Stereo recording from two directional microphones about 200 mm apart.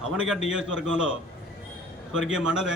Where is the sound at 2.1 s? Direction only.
5° right (ahead or behind).